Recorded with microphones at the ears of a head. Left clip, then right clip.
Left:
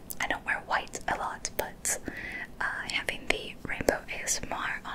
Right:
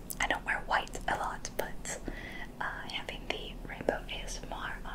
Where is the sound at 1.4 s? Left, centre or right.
Left.